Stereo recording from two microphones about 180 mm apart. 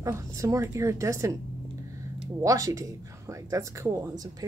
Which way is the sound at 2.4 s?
20° right (ahead or behind).